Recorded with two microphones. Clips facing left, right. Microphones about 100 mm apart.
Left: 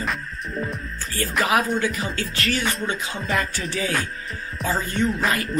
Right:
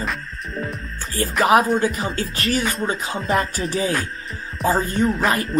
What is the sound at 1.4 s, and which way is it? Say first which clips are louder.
Music: right 6 dB; 35° right (ahead or behind).